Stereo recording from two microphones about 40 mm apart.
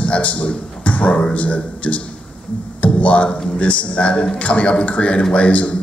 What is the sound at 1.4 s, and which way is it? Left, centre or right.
A man's voice, left.